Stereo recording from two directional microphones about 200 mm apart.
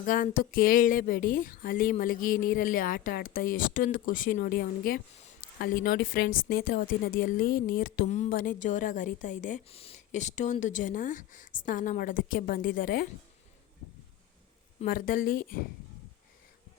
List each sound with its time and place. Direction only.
0.0 s speech: 45° left (ahead or behind)
14.8 s speech: 45° left (ahead or behind)